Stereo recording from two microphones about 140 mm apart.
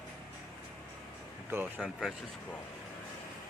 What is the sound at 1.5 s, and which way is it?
Speech, 10° right (ahead or behind).